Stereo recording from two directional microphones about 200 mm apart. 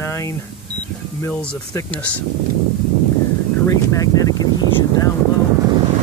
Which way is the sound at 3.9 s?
20° left (ahead or behind).